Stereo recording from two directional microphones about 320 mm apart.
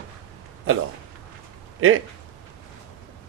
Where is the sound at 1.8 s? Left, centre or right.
Right.